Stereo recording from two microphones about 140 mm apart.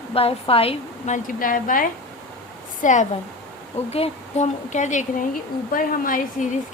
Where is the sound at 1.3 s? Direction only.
75° left (ahead or behind).